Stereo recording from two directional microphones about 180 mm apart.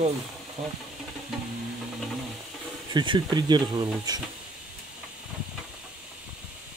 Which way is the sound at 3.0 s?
25° right (ahead or behind).